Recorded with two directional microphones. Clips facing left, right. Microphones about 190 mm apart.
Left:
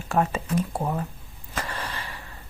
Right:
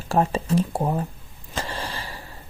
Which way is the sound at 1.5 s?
30° right (ahead or behind).